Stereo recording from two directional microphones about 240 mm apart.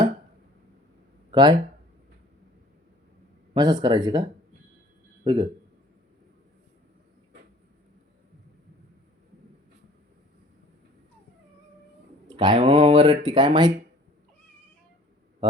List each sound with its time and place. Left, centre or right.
1.3 s speech: centre
3.5 s speech: centre
5.2 s a man's voice: centre
12.3 s speech: centre